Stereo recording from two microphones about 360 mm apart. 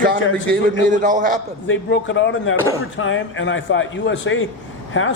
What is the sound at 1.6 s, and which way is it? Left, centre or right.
Speech, left.